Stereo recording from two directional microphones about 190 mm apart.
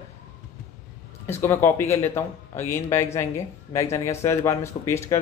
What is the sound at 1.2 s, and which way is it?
Speech, 15° left (ahead or behind).